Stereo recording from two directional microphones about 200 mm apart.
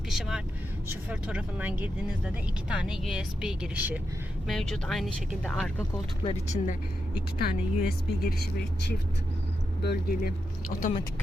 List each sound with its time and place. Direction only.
0.1 s speech: centre (ahead or behind)
6.2 s speech: 35° left (ahead or behind)
7.3 s speech: 50° left (ahead or behind)
9.8 s speech: 55° left (ahead or behind)
10.8 s speech: 40° left (ahead or behind)